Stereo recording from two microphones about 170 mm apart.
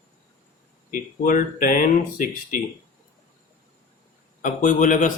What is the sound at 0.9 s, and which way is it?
Speech, 50° left (ahead or behind).